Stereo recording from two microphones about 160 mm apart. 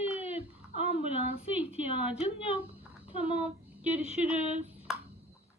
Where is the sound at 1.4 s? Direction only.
40° left (ahead or behind).